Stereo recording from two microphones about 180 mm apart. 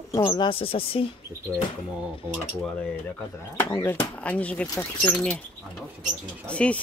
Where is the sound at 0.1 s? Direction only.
20° left (ahead or behind).